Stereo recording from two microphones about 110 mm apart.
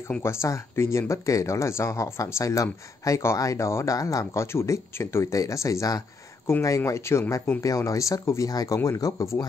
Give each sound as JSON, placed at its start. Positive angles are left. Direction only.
{"t": 0.2, "sound": "speech", "side_deg": 25}